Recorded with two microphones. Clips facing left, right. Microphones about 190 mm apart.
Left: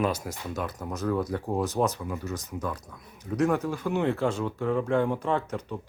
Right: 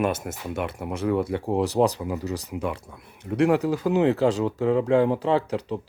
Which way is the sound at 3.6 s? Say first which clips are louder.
Right 6 dB; 35° right (ahead or behind).